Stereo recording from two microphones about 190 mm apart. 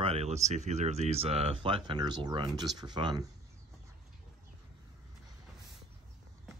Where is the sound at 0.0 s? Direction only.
35° right (ahead or behind).